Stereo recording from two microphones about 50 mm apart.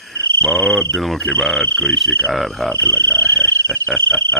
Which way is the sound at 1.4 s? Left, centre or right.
Centre.